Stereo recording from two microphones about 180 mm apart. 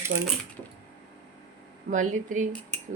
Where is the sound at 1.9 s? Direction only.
45° right (ahead or behind).